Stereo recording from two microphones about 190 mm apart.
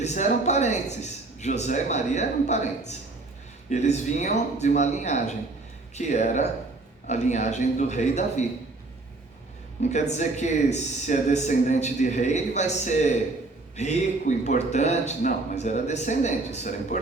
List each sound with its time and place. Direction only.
0.0 s a man's voice: 40° left (ahead or behind)
3.7 s a man's voice: 40° left (ahead or behind)
9.9 s a man's voice: 35° left (ahead or behind)